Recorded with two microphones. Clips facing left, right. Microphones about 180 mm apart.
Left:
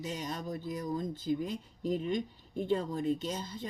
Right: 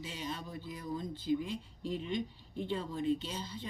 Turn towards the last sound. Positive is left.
turn(degrees=45)  # may be behind; listen again after turning